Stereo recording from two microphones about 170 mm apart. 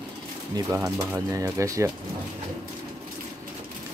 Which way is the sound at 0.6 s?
15° right (ahead or behind).